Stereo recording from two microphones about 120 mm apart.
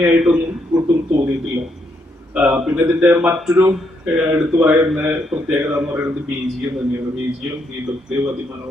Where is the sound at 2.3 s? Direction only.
10° right (ahead or behind).